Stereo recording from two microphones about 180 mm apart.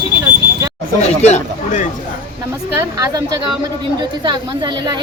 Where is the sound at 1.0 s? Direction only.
35° left (ahead or behind).